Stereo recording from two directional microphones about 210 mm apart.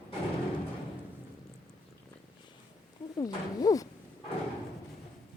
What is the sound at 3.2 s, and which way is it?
Speech, 15° left (ahead or behind).